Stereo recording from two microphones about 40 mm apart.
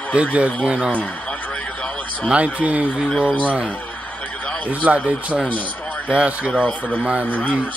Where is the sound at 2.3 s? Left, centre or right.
Right.